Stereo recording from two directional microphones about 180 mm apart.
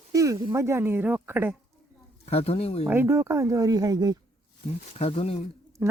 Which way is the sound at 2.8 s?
10° right (ahead or behind).